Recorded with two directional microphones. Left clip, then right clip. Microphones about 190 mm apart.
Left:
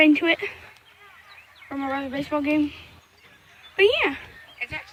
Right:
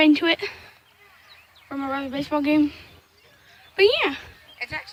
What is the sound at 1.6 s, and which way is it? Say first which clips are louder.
Speech: even; 5° right (ahead or behind).